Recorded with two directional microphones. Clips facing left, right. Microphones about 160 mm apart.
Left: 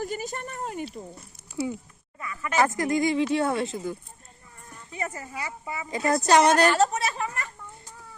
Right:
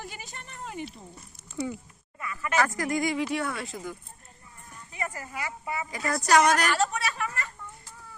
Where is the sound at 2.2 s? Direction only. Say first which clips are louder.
Left 3 dB; 20° left (ahead or behind).